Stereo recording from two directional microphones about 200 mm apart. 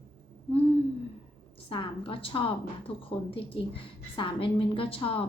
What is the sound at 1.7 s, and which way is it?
A woman's voice, 25° left (ahead or behind).